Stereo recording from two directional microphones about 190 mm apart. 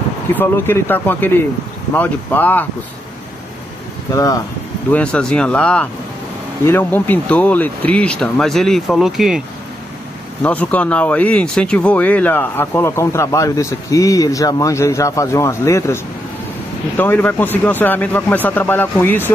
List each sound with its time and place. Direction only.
0.3 s speech: 10° left (ahead or behind)
4.1 s speech: 20° left (ahead or behind)
4.9 s speech: 5° left (ahead or behind)
10.4 s speech: 5° left (ahead or behind)